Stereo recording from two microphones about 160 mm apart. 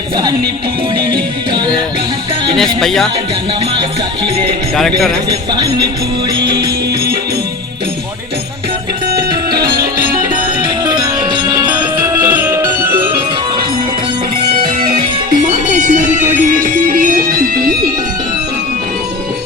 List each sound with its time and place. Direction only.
2.8 s speech: centre (ahead or behind)
4.8 s speech: centre (ahead or behind)
5.3 s music: 25° right (ahead or behind)
10.6 s music: 25° right (ahead or behind)
11.7 s music: 10° right (ahead or behind)
15.3 s music: 55° right (ahead or behind)